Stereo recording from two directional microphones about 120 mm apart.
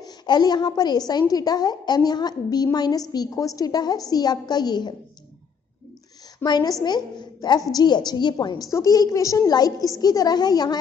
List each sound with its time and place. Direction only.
0.0 s a woman's voice: 35° left (ahead or behind)
6.4 s a woman's voice: 35° left (ahead or behind)